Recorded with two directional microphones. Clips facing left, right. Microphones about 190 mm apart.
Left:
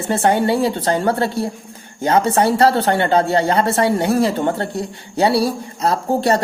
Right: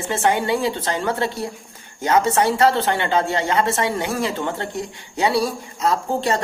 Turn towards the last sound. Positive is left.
turn(degrees=35)  # may be behind; listen again after turning